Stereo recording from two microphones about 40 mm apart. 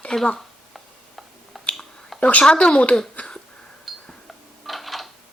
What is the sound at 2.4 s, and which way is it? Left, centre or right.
Speech, left.